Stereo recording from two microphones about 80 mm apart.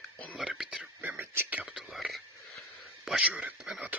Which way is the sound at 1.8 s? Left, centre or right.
Centre.